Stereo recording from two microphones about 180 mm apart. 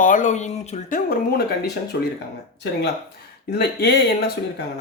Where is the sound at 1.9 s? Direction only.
65° left (ahead or behind).